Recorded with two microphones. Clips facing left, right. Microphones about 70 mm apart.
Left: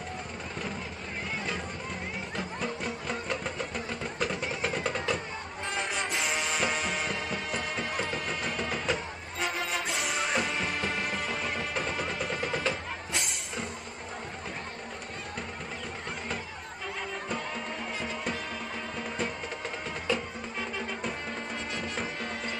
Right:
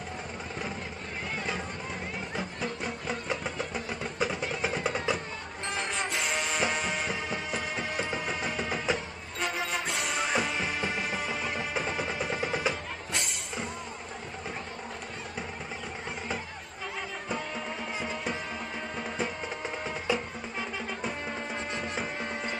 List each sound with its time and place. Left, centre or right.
2.3 s a sound: centre
5.7 s music: centre
18.9 s music: centre
20.1 s music: centre
20.5 s music: centre